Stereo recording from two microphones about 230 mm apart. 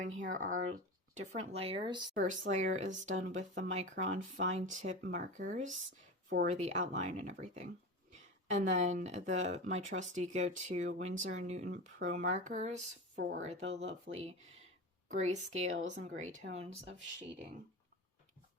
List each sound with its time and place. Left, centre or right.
0.2 s speech: right
2.1 s speech: right